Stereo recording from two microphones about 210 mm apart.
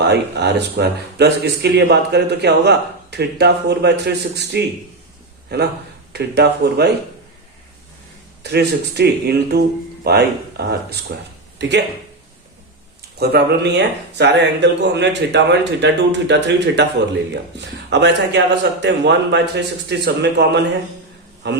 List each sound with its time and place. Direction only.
0.0 s speech: 55° right (ahead or behind)
8.4 s speech: 50° right (ahead or behind)
13.1 s speech: 50° right (ahead or behind)
17.9 s speech: 55° right (ahead or behind)